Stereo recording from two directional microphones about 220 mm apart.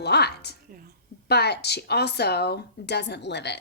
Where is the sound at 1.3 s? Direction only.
50° left (ahead or behind).